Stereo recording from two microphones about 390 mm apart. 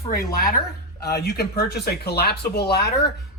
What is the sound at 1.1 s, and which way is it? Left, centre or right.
Speech, left.